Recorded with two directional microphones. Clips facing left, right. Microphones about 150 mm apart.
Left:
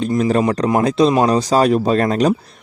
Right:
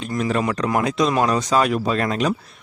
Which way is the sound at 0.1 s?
35° left (ahead or behind).